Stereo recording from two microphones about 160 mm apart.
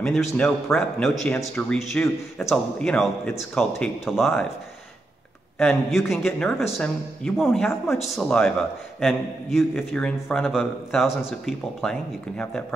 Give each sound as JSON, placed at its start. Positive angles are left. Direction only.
{"t": 0.0, "sound": "a man's voice", "side_deg": 0}
{"t": 5.6, "sound": "a man's voice", "side_deg": 0}